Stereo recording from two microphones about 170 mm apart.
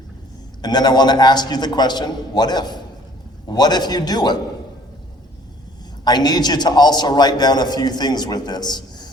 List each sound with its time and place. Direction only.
0.6 s a man's voice: 25° left (ahead or behind)
6.1 s a man's voice: 25° left (ahead or behind)